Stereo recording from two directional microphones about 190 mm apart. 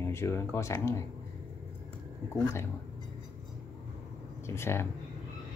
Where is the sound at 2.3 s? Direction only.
15° left (ahead or behind).